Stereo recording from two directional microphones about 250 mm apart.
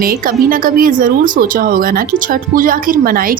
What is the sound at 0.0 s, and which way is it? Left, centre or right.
A woman's voice, right.